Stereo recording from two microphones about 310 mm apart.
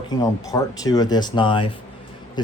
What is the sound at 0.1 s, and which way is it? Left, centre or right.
Speech, centre.